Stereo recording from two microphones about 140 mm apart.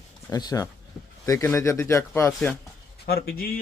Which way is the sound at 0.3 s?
25° left (ahead or behind).